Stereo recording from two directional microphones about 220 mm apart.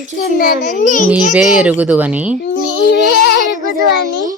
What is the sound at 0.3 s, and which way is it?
Speech, 40° left (ahead or behind).